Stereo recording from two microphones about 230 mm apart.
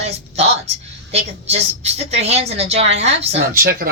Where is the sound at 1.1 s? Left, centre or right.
Right.